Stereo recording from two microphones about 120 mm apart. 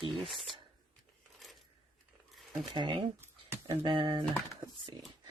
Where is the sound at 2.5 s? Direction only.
35° right (ahead or behind).